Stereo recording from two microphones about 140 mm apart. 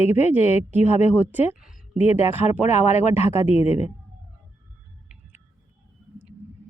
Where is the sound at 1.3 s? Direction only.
15° right (ahead or behind).